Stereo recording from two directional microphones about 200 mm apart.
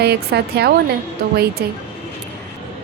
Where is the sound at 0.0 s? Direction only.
55° right (ahead or behind).